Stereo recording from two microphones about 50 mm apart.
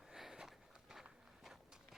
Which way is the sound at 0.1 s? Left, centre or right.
Centre.